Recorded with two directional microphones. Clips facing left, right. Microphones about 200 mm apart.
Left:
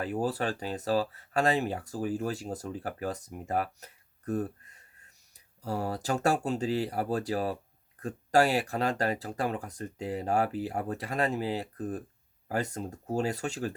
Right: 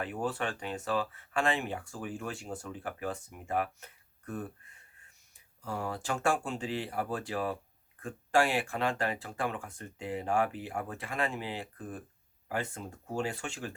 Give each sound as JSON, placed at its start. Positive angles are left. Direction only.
{"t": 0.0, "sound": "speech", "side_deg": 35}